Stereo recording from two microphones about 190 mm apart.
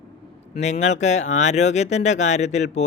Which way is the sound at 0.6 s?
35° left (ahead or behind).